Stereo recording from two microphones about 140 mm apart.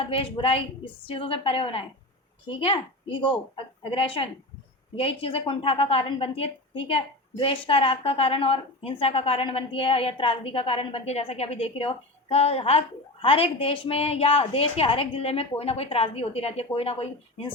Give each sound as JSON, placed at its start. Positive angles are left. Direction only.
{"t": 0.0, "sound": "a woman's voice", "side_deg": 40}